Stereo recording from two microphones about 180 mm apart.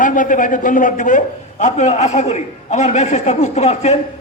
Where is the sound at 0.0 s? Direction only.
45° left (ahead or behind).